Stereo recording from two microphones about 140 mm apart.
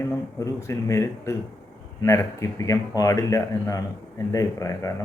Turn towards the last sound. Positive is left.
turn(degrees=20)  # may be behind; listen again after turning